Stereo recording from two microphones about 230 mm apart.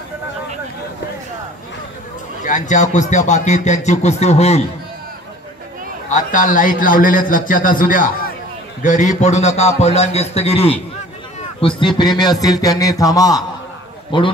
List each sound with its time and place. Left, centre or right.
2.4 s speech: left
6.1 s a man's voice: left
12.2 s music: centre
14.1 s a man's voice: left